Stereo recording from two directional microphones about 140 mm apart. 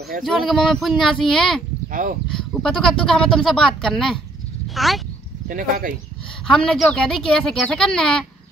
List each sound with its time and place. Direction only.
0.2 s speech: centre (ahead or behind)
1.9 s speech: 70° right (ahead or behind)
2.3 s speech: 5° left (ahead or behind)
5.5 s speech: 80° right
6.4 s speech: 5° left (ahead or behind)